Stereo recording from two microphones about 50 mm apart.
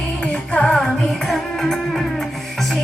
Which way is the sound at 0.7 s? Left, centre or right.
Centre.